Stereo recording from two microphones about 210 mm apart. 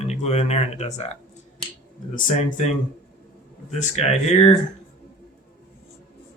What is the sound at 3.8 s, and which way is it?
Speech, 30° left (ahead or behind).